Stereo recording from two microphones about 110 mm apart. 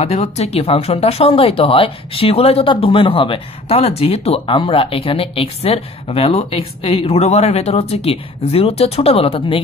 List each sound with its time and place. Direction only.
0.0 s a woman's voice: 75° left (ahead or behind)
2.7 s a woman's voice: 55° left (ahead or behind)
4.6 s a woman's voice: 55° left (ahead or behind)